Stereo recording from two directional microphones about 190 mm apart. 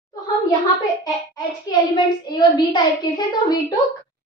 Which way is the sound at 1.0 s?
20° left (ahead or behind).